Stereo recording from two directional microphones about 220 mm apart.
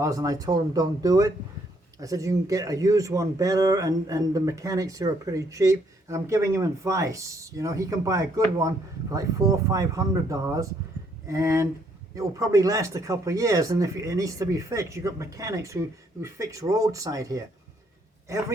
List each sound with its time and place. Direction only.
0.0 s speech: 15° right (ahead or behind)